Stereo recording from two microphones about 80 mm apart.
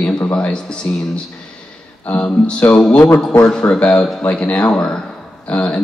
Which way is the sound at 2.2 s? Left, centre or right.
Centre.